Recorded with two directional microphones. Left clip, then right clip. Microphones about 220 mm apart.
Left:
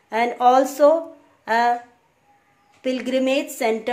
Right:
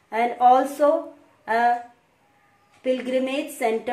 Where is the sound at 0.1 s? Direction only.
45° left (ahead or behind).